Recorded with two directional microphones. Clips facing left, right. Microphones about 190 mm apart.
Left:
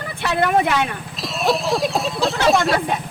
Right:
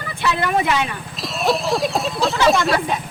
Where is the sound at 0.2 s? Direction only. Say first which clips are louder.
Left 2 dB; 55° left (ahead or behind).